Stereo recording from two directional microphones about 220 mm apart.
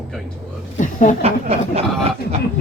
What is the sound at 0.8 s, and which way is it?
Speech, 35° left (ahead or behind).